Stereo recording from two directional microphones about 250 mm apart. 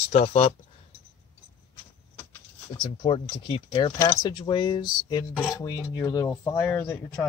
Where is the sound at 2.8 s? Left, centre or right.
Left.